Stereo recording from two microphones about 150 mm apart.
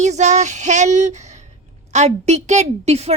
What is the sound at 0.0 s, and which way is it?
Speech, 50° right (ahead or behind).